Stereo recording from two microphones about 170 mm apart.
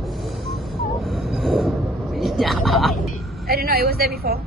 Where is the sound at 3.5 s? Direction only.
65° right (ahead or behind).